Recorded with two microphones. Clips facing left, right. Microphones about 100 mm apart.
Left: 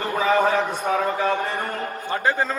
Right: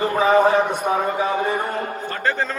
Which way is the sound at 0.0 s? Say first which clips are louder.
Right 4 dB; 20° right (ahead or behind).